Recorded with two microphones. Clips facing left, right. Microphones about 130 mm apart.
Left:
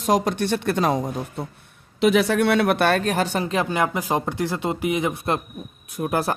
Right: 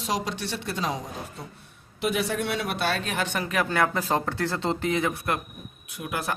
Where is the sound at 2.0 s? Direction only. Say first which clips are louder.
Left 9 dB; 80° left; by 3.7 s 25° left (ahead or behind).